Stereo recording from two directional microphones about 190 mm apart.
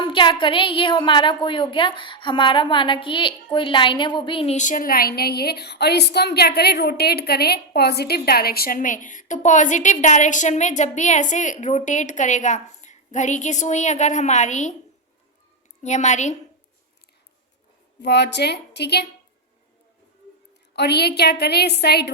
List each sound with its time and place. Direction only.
0.0 s a woman's voice: 25° left (ahead or behind)
15.8 s a woman's voice: 35° left (ahead or behind)
18.0 s a woman's voice: 65° left (ahead or behind)
20.7 s a woman's voice: 60° left (ahead or behind)